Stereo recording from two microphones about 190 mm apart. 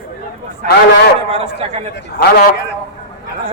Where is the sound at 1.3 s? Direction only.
30° right (ahead or behind).